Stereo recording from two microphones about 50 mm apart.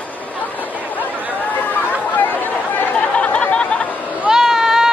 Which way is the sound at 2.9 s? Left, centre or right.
Left.